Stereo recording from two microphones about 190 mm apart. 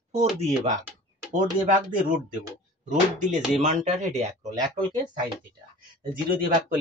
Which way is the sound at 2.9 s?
40° right (ahead or behind).